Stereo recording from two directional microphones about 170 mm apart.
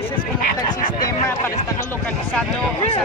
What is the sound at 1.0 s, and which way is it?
Speech, 20° left (ahead or behind).